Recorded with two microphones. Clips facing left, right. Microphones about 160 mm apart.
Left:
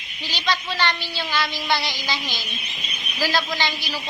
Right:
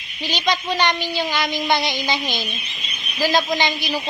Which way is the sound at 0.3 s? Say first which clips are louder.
Right 4 dB; 20° right (ahead or behind).